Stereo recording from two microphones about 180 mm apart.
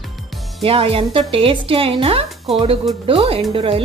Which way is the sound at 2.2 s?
Centre (ahead or behind).